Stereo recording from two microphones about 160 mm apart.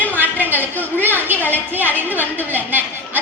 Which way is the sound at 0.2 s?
10° right (ahead or behind).